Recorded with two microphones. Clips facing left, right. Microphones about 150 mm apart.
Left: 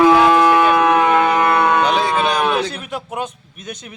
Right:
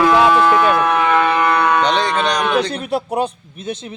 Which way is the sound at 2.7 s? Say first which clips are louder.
Right 7 dB; 35° right (ahead or behind).